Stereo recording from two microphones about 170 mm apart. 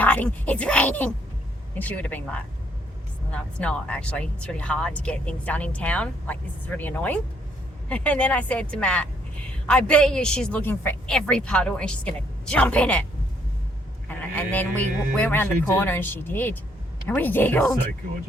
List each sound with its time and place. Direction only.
0.0 s speech: 10° left (ahead or behind)
3.6 s a woman's voice: 10° left (ahead or behind)
14.1 s a man's voice: 10° left (ahead or behind)
14.8 s speech: 45° right (ahead or behind)
15.1 s speech: 10° left (ahead or behind)